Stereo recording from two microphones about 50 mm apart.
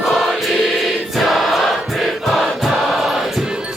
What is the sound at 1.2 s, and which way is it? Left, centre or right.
Choir, centre.